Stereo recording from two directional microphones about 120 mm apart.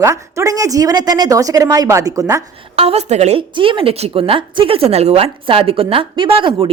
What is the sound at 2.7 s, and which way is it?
Speech, 60° right (ahead or behind).